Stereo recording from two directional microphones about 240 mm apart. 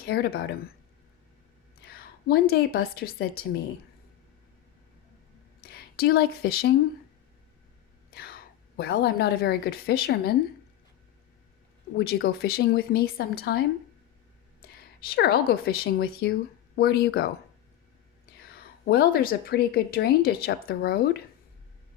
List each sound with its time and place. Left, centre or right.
0.0 s speech: left
1.8 s a woman's voice: left
5.5 s speech: left
8.1 s a woman's voice: left
11.9 s speech: left
14.6 s a woman's voice: left
18.4 s speech: left